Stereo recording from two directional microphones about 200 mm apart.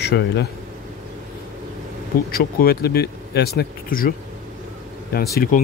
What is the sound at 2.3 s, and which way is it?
Speech, 50° left (ahead or behind).